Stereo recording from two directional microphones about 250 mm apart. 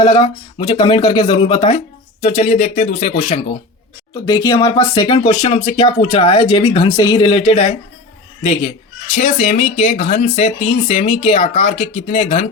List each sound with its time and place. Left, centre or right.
0.0 s speech: centre
4.1 s speech: centre
9.1 s speech: left